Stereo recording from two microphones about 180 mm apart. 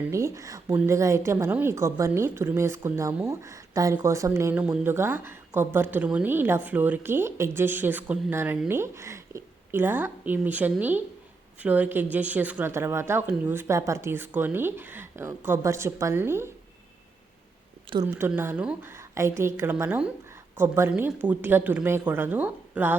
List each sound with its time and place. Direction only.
0.1 s a woman's voice: 15° right (ahead or behind)
18.1 s a woman's voice: 10° right (ahead or behind)